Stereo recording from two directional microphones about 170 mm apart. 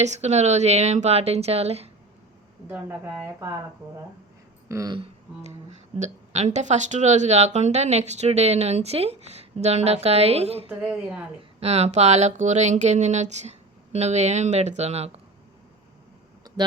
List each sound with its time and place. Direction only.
0.0 s speech: 40° right (ahead or behind)
2.6 s speech: 10° right (ahead or behind)
4.9 s speech: 40° right (ahead or behind)
10.7 s a woman's voice: 5° right (ahead or behind)
11.6 s speech: 40° right (ahead or behind)